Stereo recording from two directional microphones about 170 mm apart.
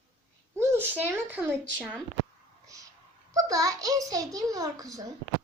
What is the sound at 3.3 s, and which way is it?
A child's voice, 20° right (ahead or behind).